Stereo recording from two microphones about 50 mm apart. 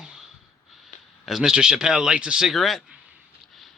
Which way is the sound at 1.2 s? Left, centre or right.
Centre.